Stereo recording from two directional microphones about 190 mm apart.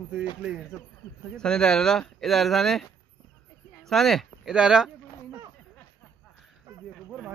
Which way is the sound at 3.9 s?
Centre (ahead or behind).